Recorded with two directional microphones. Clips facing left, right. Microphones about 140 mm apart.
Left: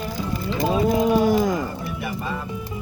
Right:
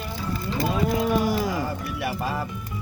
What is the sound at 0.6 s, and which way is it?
Cattle, 20° left (ahead or behind).